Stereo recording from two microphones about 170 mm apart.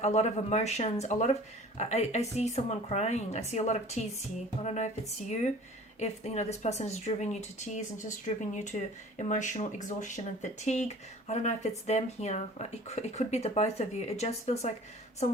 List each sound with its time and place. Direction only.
0.0 s speech: 40° left (ahead or behind)
8.7 s speech: 30° left (ahead or behind)
9.1 s speech: 45° left (ahead or behind)